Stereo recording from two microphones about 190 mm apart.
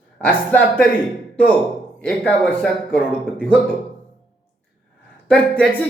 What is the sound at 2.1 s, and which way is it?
Speech, 5° left (ahead or behind).